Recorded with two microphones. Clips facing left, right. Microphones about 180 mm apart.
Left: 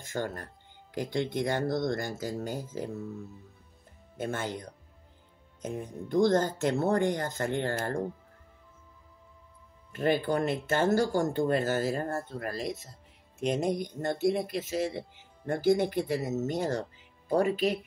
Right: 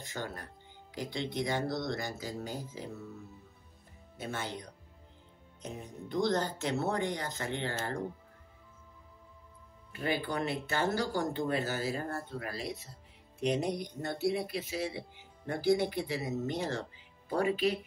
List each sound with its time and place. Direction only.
0.0 s speech: 50° left (ahead or behind)
4.2 s speech: 50° left (ahead or behind)
5.7 s speech: 50° left (ahead or behind)
9.9 s speech: 45° left (ahead or behind)